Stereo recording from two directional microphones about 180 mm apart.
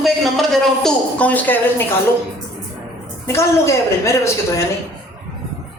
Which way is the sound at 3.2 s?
15° left (ahead or behind).